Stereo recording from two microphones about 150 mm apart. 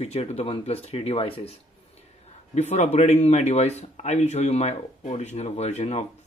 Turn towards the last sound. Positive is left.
turn(degrees=45)  # may be behind; listen again after turning